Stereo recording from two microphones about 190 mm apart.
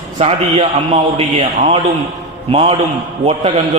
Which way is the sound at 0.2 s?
30° right (ahead or behind).